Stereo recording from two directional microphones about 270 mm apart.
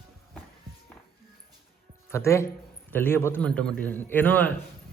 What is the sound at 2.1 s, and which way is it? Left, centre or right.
A man's voice, centre.